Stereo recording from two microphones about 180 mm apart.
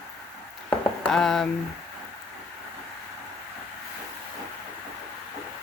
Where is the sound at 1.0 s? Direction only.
5° left (ahead or behind).